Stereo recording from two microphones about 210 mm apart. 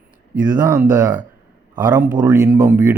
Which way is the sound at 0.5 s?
10° right (ahead or behind).